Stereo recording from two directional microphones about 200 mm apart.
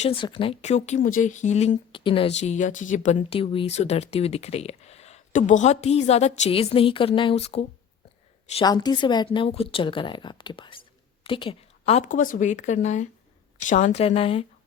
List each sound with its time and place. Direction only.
0.0 s speech: 25° left (ahead or behind)
8.5 s speech: 20° left (ahead or behind)